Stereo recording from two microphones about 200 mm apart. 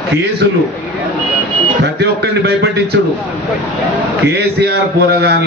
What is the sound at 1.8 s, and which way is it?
Speech, 60° right (ahead or behind).